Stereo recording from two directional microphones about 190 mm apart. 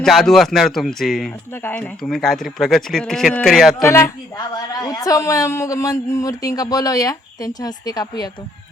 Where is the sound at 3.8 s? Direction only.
15° left (ahead or behind).